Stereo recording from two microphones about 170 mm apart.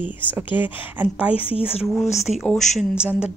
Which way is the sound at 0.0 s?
10° right (ahead or behind).